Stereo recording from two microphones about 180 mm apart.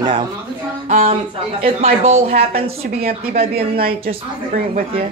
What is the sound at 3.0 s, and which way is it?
A woman's voice, 55° right (ahead or behind).